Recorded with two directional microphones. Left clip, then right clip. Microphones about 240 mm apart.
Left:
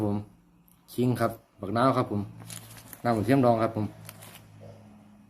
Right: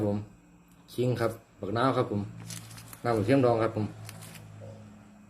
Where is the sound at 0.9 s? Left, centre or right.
Left.